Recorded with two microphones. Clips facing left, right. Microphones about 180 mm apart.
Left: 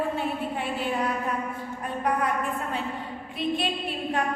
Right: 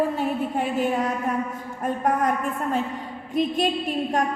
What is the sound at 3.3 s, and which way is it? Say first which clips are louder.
Speech: right 5 dB; 45° right (ahead or behind).